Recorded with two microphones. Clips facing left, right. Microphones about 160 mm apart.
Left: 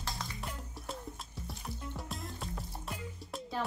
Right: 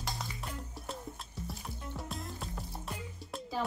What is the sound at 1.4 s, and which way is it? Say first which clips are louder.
Music: right 1 dB; centre (ahead or behind).